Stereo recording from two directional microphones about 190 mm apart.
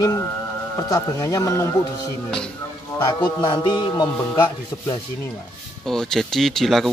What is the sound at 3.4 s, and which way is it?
Music, 25° left (ahead or behind).